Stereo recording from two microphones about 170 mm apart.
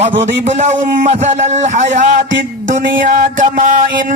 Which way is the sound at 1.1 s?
45° right (ahead or behind).